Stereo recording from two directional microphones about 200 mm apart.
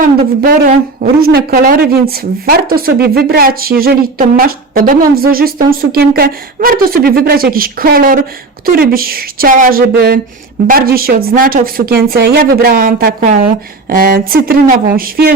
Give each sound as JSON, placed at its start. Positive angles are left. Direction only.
{"t": 0.0, "sound": "speech", "side_deg": -45}